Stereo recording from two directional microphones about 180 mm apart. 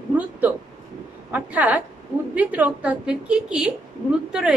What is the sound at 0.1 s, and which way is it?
A woman's voice, 10° right (ahead or behind).